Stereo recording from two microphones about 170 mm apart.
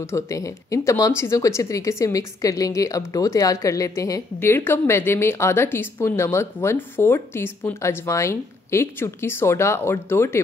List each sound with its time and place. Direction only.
0.1 s speech: 20° left (ahead or behind)